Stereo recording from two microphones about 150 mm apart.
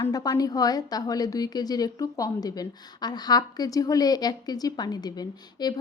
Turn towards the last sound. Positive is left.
turn(degrees=25)  # may be behind; listen again after turning